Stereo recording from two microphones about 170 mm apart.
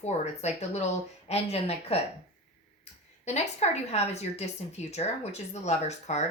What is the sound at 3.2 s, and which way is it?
Speech, 40° left (ahead or behind).